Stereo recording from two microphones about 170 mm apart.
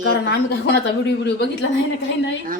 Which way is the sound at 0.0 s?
90° left.